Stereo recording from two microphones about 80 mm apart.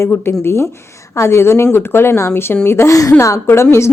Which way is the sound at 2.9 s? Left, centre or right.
Left.